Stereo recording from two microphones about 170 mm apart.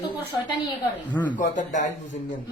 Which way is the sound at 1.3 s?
45° left (ahead or behind).